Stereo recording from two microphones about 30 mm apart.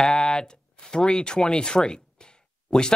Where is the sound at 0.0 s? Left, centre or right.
Centre.